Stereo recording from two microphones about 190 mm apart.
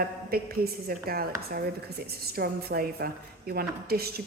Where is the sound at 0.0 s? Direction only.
50° right (ahead or behind).